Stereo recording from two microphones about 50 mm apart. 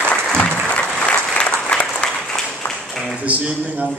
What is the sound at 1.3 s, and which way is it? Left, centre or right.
Applause, centre.